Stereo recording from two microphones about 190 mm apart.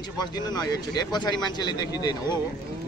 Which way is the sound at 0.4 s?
20° left (ahead or behind).